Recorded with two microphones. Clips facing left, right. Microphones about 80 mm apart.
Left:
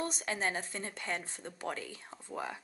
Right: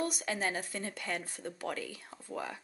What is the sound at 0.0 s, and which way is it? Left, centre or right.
Speech, left.